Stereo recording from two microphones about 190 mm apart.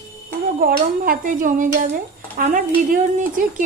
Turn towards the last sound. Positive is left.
turn(degrees=-45)  # may be behind; listen again after turning